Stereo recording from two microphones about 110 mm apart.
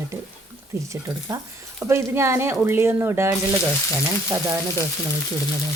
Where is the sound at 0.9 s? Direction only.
25° right (ahead or behind).